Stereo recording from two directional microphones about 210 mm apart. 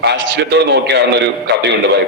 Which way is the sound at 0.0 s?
55° right (ahead or behind).